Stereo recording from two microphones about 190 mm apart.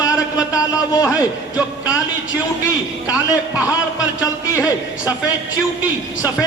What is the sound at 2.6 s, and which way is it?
Speech, 15° left (ahead or behind).